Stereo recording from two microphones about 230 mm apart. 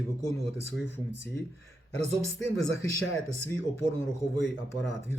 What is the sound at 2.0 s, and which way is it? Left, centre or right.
Speech, right.